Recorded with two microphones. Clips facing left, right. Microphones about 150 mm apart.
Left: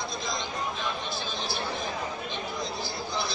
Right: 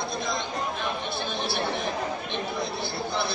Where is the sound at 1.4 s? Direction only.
65° right (ahead or behind).